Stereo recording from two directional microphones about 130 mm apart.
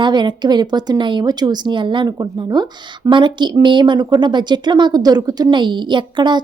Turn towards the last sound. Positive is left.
turn(degrees=-35)  # may be behind; listen again after turning